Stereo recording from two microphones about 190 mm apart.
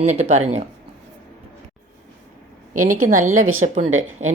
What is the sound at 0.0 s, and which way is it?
Speech, 35° right (ahead or behind).